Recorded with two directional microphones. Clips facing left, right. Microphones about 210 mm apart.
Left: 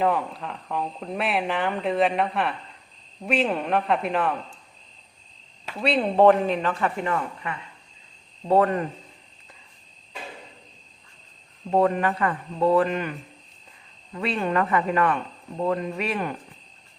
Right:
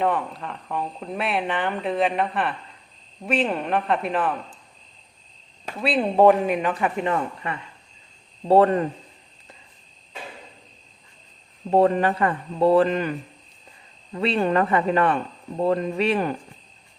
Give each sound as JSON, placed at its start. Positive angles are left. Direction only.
{"t": 0.0, "sound": "speech", "side_deg": 0}
{"t": 5.8, "sound": "speech", "side_deg": -5}
{"t": 11.7, "sound": "speech", "side_deg": -30}